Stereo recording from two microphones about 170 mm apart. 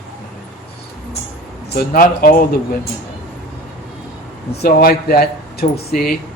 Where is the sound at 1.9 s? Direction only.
55° left (ahead or behind).